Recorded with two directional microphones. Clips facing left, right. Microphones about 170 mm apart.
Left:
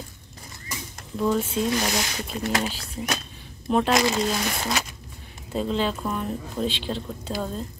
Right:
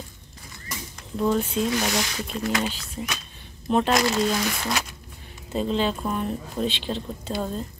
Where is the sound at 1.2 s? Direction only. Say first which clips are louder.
Right 1 dB; centre (ahead or behind).